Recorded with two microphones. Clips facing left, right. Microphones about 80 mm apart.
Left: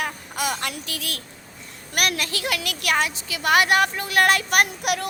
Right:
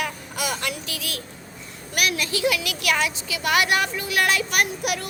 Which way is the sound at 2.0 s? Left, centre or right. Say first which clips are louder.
Right 1 dB; left.